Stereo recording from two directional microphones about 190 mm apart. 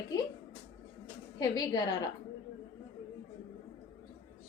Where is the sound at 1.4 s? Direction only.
20° left (ahead or behind).